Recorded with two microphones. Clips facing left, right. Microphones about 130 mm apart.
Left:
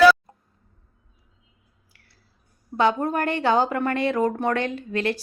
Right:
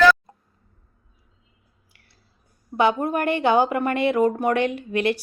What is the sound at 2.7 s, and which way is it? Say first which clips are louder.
A woman's voice: right 1 dB; 15° right (ahead or behind).